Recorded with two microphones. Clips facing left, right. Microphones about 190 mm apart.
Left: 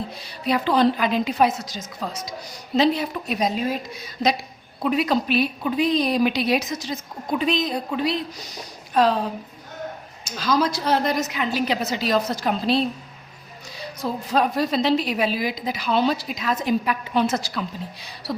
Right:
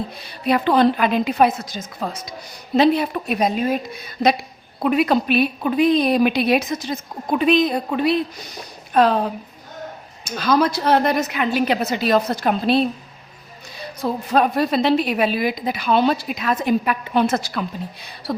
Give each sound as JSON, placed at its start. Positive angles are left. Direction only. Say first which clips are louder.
{"t": 0.4, "sound": "a woman's voice", "louder": "right 3 dB", "side_deg": -55}
{"t": 10.2, "sound": "a woman's voice", "louder": "right 4 dB", "side_deg": -60}
{"t": 14.0, "sound": "a woman's voice", "louder": "right 4 dB", "side_deg": -55}